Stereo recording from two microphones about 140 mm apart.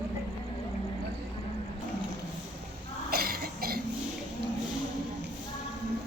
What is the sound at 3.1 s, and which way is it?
Cough, 90° right.